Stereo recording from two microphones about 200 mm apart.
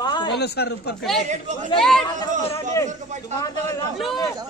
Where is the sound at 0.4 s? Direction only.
55° left (ahead or behind).